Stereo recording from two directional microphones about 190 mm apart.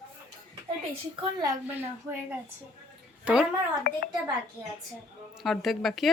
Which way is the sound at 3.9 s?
55° left (ahead or behind).